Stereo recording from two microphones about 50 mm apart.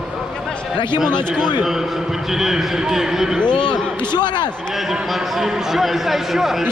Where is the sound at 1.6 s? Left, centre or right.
Centre.